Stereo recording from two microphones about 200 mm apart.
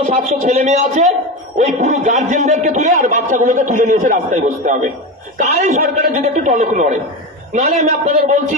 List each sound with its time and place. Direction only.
0.1 s a man's voice: 35° right (ahead or behind)